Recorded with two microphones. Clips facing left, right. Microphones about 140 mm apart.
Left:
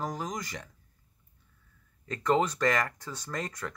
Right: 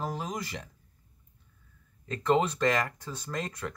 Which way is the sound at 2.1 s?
25° right (ahead or behind).